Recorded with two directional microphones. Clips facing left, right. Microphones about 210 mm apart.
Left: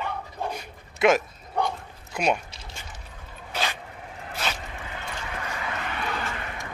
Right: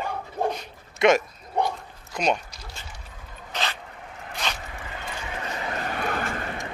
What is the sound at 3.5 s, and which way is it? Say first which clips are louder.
Dog: left 1 dB; 10° left (ahead or behind).